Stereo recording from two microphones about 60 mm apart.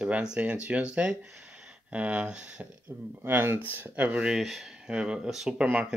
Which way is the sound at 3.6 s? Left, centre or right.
Right.